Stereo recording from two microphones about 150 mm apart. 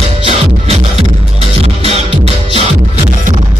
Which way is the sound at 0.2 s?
40° right (ahead or behind).